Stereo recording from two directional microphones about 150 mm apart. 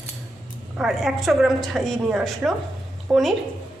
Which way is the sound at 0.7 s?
Centre (ahead or behind).